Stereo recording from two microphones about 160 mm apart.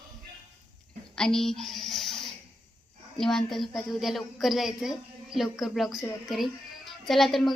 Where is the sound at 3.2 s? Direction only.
Centre (ahead or behind).